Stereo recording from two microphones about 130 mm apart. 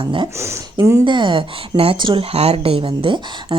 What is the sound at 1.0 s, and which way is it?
Speech, 40° right (ahead or behind).